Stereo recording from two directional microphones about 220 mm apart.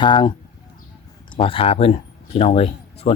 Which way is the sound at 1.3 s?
25° left (ahead or behind).